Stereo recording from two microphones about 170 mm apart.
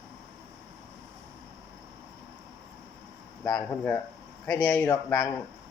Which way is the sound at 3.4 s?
5° left (ahead or behind).